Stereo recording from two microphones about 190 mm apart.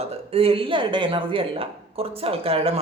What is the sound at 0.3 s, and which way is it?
A woman's voice, 30° right (ahead or behind).